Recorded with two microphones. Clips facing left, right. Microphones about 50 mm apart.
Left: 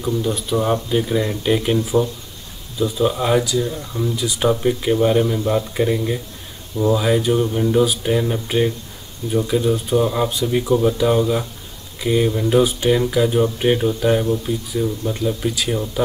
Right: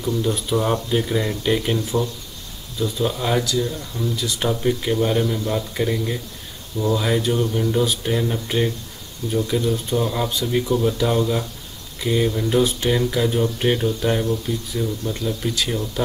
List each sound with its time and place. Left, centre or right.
0.2 s speech: centre
2.8 s speech: centre
14.5 s speech: left
15.4 s speech: centre